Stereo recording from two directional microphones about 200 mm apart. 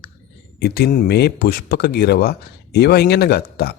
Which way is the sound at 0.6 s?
50° left (ahead or behind).